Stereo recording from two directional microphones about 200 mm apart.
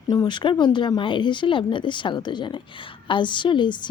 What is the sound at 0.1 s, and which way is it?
A woman's voice, 20° left (ahead or behind).